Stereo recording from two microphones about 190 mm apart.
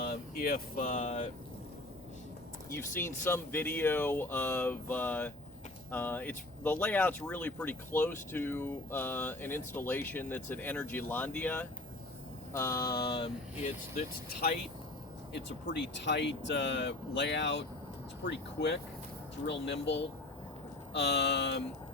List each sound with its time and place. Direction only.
0.0 s speech: 50° left (ahead or behind)
2.6 s speech: 10° left (ahead or behind)
12.5 s mantra: 15° left (ahead or behind)
15.4 s speech: 70° left (ahead or behind)